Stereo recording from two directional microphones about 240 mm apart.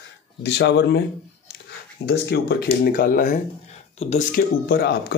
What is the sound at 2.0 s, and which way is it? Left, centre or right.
Speech, left.